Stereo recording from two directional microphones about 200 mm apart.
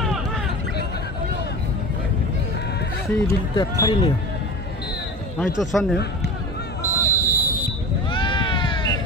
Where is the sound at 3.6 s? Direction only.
20° left (ahead or behind).